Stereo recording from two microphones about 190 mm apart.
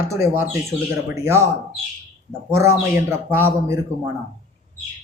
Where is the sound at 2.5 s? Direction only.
15° right (ahead or behind).